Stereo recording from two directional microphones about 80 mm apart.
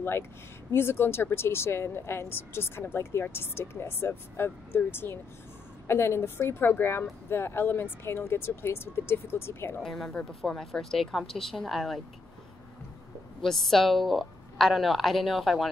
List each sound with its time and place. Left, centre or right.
0.7 s a woman's voice: left
9.8 s a woman's voice: centre
13.4 s a woman's voice: centre